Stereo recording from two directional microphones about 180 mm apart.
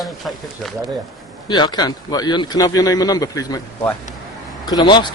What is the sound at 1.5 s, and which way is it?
A man's voice, 25° left (ahead or behind).